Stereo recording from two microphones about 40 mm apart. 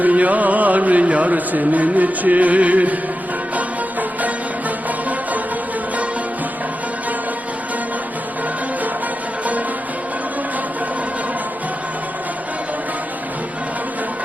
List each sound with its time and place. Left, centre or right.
0.0 s music: right